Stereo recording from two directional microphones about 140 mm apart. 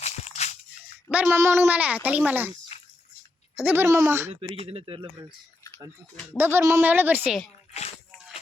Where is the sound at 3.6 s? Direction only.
15° right (ahead or behind).